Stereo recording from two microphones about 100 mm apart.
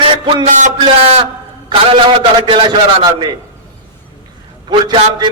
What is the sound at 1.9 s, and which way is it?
Speech, 65° right (ahead or behind).